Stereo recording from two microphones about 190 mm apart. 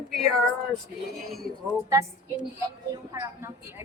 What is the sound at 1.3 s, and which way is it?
Speech, centre (ahead or behind).